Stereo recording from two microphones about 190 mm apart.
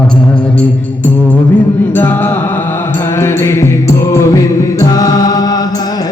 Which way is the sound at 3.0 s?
15° left (ahead or behind).